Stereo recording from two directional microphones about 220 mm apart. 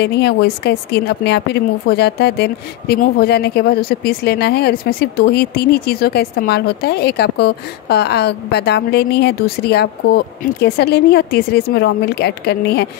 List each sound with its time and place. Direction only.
0.0 s a woman's voice: 50° left (ahead or behind)